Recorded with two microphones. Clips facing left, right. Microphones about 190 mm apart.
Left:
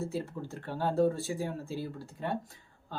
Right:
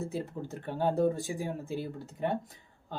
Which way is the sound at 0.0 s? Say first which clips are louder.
Even; 20° right (ahead or behind).